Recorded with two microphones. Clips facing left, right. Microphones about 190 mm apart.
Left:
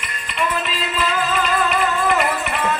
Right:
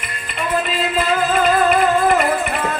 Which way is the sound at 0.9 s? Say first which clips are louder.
Right 3 dB; 50° right (ahead or behind).